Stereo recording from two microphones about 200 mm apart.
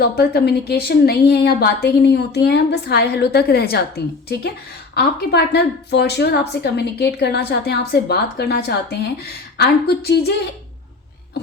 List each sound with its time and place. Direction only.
0.0 s a woman's voice: 50° left (ahead or behind)